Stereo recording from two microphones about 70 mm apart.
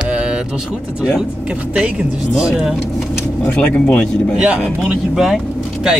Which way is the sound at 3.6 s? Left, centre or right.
Centre.